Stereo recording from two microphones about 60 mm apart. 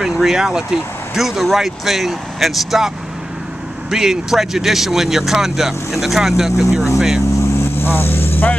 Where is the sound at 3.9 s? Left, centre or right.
Centre.